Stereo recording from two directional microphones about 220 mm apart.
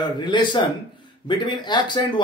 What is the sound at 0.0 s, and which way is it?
A man's voice, 20° left (ahead or behind).